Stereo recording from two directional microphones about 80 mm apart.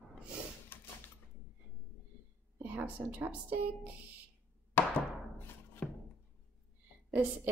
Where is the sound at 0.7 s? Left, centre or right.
Left.